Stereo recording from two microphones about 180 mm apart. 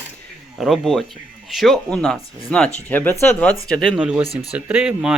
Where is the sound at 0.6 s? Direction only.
Centre (ahead or behind).